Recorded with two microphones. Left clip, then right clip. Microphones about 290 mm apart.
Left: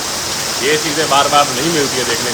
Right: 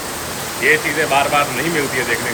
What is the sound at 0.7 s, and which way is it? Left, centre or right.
Speech, centre.